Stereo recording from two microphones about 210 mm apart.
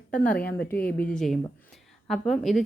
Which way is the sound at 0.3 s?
45° left (ahead or behind).